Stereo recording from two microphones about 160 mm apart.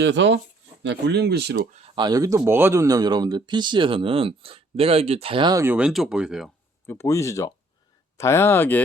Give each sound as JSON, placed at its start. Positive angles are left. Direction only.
{"t": 1.0, "sound": "speech", "side_deg": -90}
{"t": 2.0, "sound": "speech", "side_deg": -25}
{"t": 5.6, "sound": "speech", "side_deg": -5}
{"t": 6.8, "sound": "speech", "side_deg": 15}